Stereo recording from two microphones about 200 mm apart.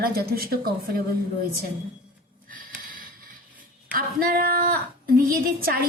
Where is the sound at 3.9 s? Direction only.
45° right (ahead or behind).